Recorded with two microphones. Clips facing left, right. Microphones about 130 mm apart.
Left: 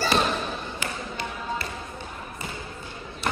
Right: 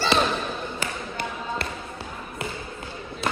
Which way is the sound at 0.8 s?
55° right (ahead or behind).